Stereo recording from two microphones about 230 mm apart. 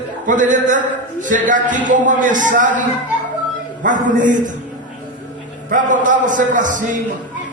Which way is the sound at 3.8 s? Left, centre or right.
Right.